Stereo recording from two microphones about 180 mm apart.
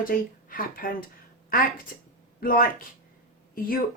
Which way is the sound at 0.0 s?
50° left (ahead or behind).